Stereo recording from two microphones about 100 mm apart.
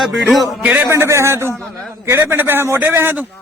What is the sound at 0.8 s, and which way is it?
A man's voice, 25° right (ahead or behind).